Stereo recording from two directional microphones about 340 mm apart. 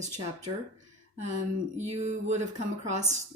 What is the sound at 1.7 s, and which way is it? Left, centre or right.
Speech, centre.